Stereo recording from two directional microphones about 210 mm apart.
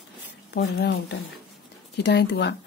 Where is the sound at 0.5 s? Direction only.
50° left (ahead or behind).